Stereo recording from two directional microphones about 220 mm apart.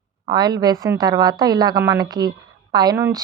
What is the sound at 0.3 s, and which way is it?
Speech, 20° right (ahead or behind).